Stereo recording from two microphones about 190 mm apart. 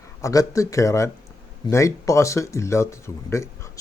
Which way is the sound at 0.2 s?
15° left (ahead or behind).